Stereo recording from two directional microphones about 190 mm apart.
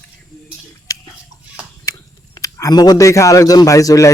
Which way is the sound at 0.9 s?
20° left (ahead or behind).